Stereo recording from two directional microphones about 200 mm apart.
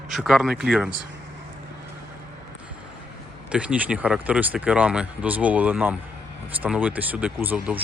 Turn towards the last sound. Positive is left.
turn(degrees=-10)  # may be behind; listen again after turning